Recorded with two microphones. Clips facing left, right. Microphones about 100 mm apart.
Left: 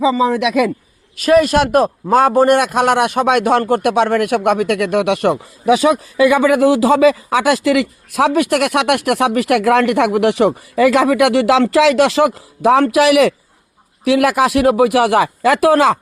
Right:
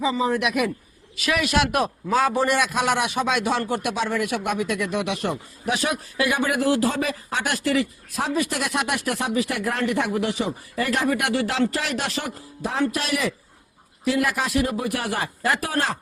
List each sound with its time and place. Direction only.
0.1 s speech: 90° left
1.1 s a man's voice: 40° left (ahead or behind); by 5.4 s 65° left (ahead or behind)
6.6 s speech: 90° left